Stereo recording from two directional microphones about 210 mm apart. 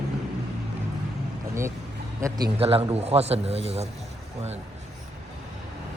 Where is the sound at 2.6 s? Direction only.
25° right (ahead or behind).